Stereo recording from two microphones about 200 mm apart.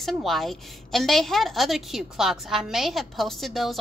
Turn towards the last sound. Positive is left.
turn(degrees=0)  # may be behind; listen again after turning